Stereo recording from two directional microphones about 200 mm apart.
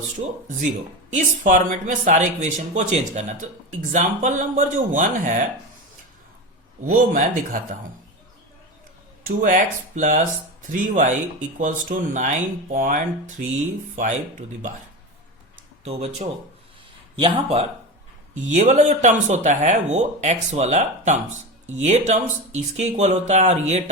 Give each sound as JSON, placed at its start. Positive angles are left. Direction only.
{"t": 1.1, "sound": "speech", "side_deg": -40}
{"t": 6.8, "sound": "speech", "side_deg": -45}
{"t": 9.4, "sound": "speech", "side_deg": -40}
{"t": 15.8, "sound": "speech", "side_deg": -35}
{"t": 18.3, "sound": "speech", "side_deg": -35}